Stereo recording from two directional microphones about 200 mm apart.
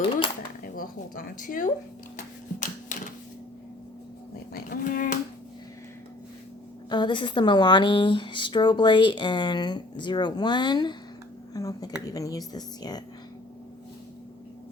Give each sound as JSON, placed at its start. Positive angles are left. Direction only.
{"t": 0.6, "sound": "speech", "side_deg": 45}
{"t": 2.1, "sound": "typewriter", "side_deg": 40}
{"t": 4.5, "sound": "a sound", "side_deg": 45}
{"t": 6.9, "sound": "a woman's voice", "side_deg": 25}